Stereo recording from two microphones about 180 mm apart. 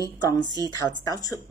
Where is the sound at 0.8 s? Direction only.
20° left (ahead or behind).